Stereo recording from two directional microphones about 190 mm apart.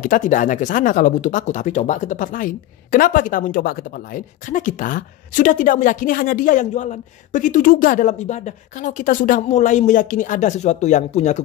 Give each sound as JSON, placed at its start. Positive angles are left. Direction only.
{"t": 0.0, "sound": "speech", "side_deg": 45}